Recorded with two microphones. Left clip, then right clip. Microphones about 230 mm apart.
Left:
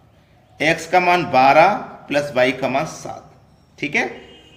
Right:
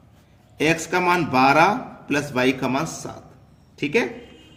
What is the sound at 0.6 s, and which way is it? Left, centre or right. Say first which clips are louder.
Speech: left 4 dB; right.